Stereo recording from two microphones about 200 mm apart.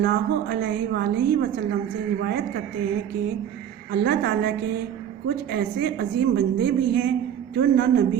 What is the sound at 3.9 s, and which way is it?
A woman's voice, 55° right (ahead or behind).